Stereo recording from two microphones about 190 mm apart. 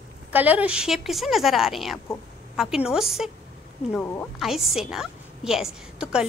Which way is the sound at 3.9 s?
10° left (ahead or behind).